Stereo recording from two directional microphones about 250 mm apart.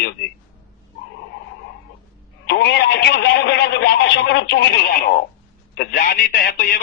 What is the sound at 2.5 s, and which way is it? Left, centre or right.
Speech, left.